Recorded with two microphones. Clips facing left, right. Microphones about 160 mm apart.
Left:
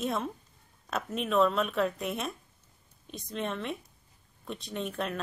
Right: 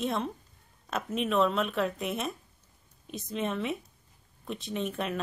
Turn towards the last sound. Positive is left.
turn(degrees=0)  # may be behind; listen again after turning